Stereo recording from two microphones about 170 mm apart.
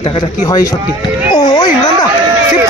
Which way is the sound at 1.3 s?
25° left (ahead or behind).